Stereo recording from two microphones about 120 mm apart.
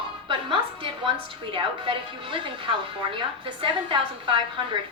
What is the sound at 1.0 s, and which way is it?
A woman's voice, 45° right (ahead or behind).